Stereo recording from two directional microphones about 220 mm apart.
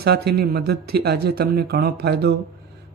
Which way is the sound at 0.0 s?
45° right (ahead or behind).